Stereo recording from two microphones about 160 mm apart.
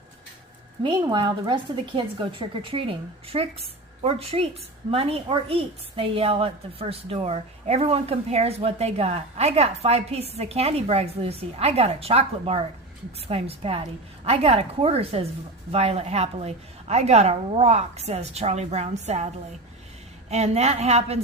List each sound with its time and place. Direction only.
0.8 s a woman's voice: 30° right (ahead or behind)
20.3 s a woman's voice: 40° right (ahead or behind)